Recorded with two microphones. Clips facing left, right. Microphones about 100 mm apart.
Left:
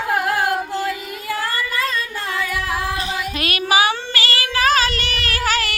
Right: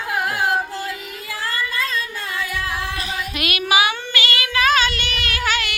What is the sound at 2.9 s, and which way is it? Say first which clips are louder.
Child singing: left 3 dB; 35° left (ahead or behind).